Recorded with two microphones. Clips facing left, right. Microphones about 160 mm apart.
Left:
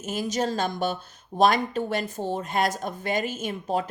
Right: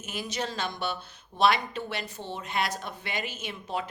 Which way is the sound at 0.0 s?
45° left (ahead or behind).